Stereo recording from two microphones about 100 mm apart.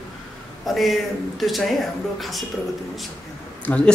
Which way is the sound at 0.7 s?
Centre (ahead or behind).